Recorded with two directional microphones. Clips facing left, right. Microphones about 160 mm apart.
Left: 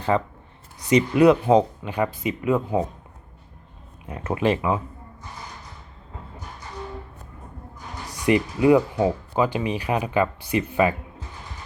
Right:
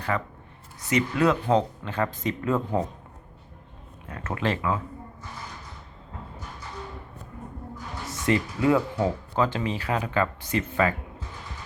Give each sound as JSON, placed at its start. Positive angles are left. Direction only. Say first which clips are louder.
{"t": 0.1, "sound": "speech", "louder": "left 6 dB", "side_deg": 25}
{"t": 4.0, "sound": "speech", "louder": "left 6 dB", "side_deg": 20}
{"t": 8.2, "sound": "speech", "louder": "left 4 dB", "side_deg": 15}